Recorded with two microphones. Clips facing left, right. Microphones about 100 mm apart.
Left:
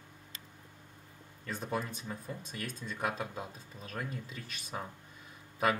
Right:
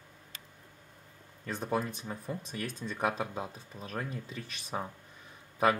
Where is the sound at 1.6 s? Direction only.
30° right (ahead or behind).